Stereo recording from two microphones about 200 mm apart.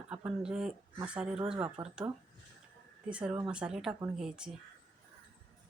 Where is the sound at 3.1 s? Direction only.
5° right (ahead or behind).